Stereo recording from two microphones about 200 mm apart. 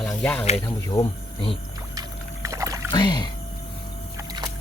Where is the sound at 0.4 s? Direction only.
30° left (ahead or behind).